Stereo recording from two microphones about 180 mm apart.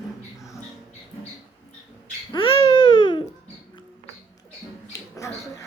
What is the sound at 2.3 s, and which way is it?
Babbling, 30° left (ahead or behind).